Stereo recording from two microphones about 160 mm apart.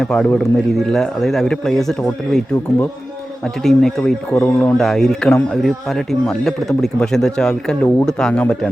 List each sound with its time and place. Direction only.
0.0 s a man's voice: centre (ahead or behind)
4.4 s speech: 15° left (ahead or behind)
4.8 s a man's voice: centre (ahead or behind)